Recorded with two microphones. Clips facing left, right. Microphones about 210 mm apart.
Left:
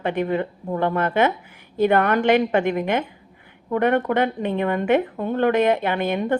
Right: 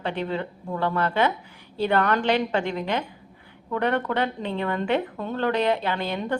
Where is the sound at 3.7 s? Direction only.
20° left (ahead or behind).